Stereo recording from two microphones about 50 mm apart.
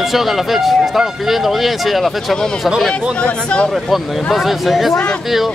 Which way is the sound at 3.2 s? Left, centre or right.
Left.